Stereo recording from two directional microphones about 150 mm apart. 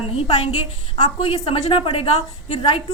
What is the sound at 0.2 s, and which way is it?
A woman's voice, 40° left (ahead or behind).